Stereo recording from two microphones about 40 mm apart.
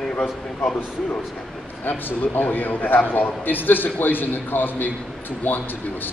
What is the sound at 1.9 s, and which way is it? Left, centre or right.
A man's voice, left.